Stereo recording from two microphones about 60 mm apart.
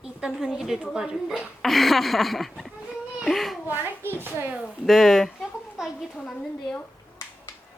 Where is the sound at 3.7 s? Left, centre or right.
Right.